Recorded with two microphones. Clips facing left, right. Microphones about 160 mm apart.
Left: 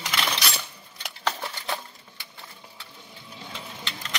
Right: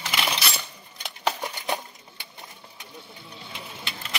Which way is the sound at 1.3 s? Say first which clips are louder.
Right 2 dB; 15° right (ahead or behind).